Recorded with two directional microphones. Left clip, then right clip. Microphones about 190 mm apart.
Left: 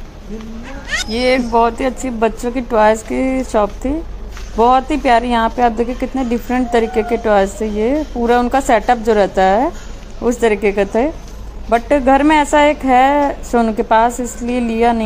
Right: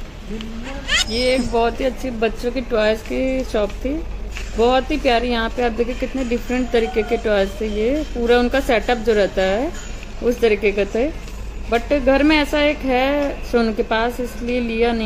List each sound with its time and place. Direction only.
1.1 s a woman's voice: 20° left (ahead or behind)